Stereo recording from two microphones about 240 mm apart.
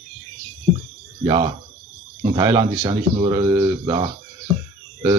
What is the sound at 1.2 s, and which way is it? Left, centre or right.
Speech, centre.